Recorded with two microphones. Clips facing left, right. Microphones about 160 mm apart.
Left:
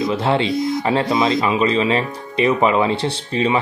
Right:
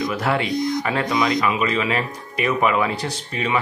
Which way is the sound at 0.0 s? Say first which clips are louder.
Left 4 dB; 25° left (ahead or behind).